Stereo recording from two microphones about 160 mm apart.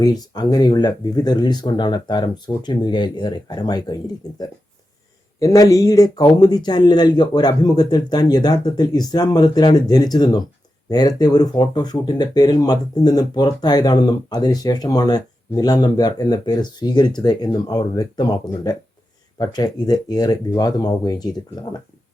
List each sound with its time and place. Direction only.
0.0 s speech: 25° left (ahead or behind)